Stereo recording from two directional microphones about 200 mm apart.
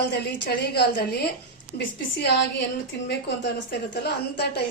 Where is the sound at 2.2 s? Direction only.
60° left (ahead or behind).